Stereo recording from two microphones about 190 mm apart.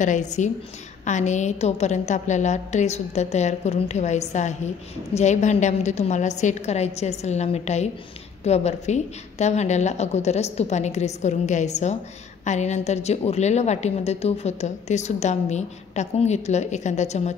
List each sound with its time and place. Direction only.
0.0 s a woman's voice: 40° left (ahead or behind)